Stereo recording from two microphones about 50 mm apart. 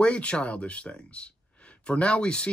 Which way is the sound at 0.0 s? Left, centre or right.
Left.